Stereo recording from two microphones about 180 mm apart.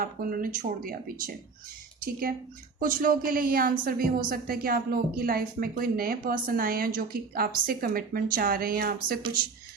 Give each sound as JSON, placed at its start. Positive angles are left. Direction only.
{"t": 0.0, "sound": "speech", "side_deg": -50}
{"t": 2.7, "sound": "a woman's voice", "side_deg": -50}